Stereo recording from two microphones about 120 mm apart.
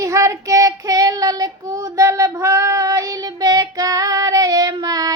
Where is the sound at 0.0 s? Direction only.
25° right (ahead or behind).